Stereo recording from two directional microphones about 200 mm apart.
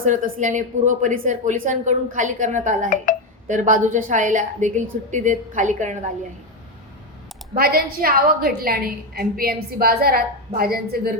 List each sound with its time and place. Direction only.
0.0 s speech: 40° right (ahead or behind)
7.5 s a woman's voice: 50° right (ahead or behind)